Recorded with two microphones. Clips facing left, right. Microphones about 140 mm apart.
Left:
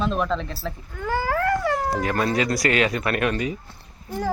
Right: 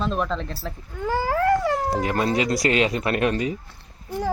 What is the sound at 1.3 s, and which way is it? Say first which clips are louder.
Speech: right 4 dB; 20° right (ahead or behind).